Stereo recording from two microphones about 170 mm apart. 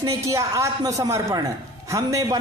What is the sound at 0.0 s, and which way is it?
A man's voice, 20° right (ahead or behind).